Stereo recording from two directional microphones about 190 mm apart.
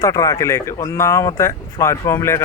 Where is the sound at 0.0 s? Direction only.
15° left (ahead or behind).